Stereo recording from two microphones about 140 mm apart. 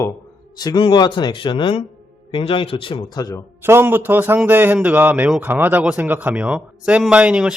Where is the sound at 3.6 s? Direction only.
15° right (ahead or behind).